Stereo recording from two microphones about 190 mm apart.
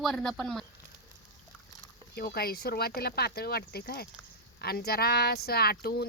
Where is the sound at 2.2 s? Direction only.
55° left (ahead or behind).